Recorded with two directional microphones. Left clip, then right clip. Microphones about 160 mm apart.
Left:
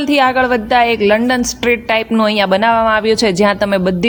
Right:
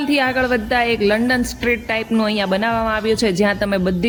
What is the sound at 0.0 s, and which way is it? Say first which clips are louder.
A woman's voice: left 6 dB; 20° left (ahead or behind).